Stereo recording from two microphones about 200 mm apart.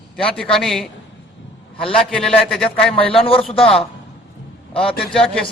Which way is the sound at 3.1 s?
25° left (ahead or behind).